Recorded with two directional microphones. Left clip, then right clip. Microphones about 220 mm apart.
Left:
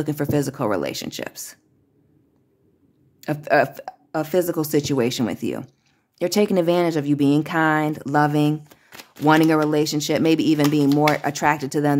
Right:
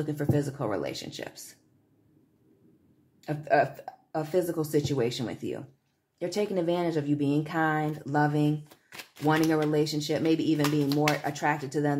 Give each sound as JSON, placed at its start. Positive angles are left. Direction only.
{"t": 0.0, "sound": "speech", "side_deg": 45}
{"t": 3.2, "sound": "speech", "side_deg": 45}
{"t": 8.6, "sound": "shuffling cards", "side_deg": 25}
{"t": 9.2, "sound": "speech", "side_deg": 45}